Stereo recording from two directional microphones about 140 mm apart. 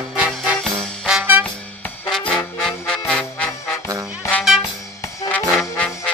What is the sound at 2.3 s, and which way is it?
Music, 5° left (ahead or behind).